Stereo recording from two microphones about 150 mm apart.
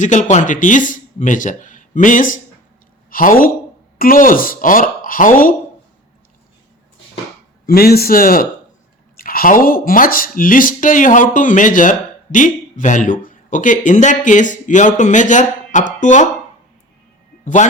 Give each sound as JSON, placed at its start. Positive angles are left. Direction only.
{"t": 0.0, "sound": "speech", "side_deg": 55}
{"t": 7.7, "sound": "a man's voice", "side_deg": 90}
{"t": 17.4, "sound": "a man's voice", "side_deg": 55}